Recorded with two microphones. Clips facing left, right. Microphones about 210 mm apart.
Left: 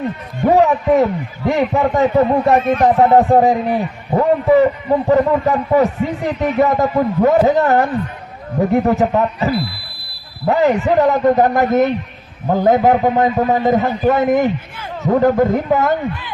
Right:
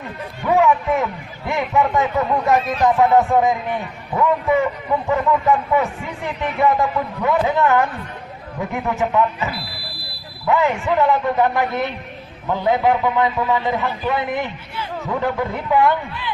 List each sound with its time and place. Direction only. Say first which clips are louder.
0.4 s a man's voice: left 4 dB; 40° left (ahead or behind)